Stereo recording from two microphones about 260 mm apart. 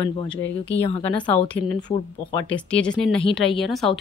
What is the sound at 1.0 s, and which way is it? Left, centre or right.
Speech, centre.